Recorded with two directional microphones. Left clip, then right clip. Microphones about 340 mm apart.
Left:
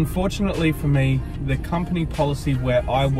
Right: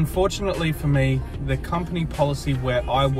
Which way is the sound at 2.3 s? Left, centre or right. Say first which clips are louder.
Left 3 dB; centre.